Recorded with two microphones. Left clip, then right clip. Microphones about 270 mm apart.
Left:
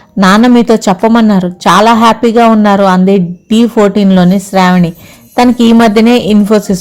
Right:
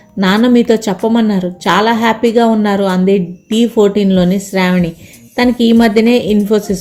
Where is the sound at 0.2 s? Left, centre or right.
Left.